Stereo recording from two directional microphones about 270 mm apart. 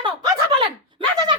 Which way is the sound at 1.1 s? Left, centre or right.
Centre.